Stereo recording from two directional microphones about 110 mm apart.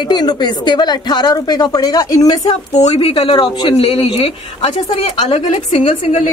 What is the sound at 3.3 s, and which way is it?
Speech, 45° left (ahead or behind).